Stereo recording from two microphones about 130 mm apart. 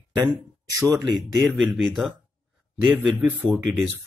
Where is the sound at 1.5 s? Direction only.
Centre (ahead or behind).